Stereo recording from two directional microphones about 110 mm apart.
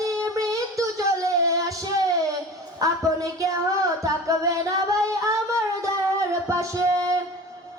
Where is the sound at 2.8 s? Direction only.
30° right (ahead or behind).